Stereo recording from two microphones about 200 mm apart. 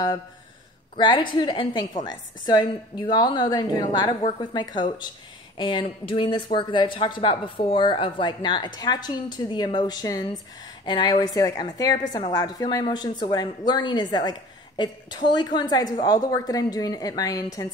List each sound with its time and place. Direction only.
0.9 s speech: 25° left (ahead or behind)